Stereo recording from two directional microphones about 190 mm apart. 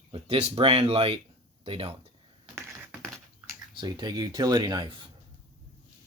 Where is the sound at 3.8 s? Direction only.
20° right (ahead or behind).